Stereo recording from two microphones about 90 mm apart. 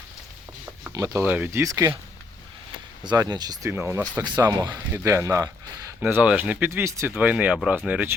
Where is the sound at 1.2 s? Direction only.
20° right (ahead or behind).